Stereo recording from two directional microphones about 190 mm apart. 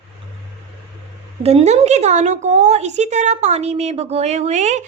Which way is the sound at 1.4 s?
35° right (ahead or behind).